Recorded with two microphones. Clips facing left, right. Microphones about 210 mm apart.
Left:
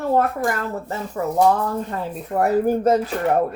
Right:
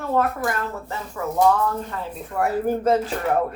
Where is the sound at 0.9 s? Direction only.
35° left (ahead or behind).